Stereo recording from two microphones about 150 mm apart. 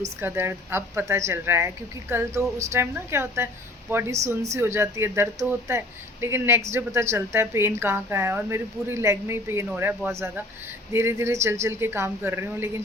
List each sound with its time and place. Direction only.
0.0 s a woman's voice: 15° right (ahead or behind)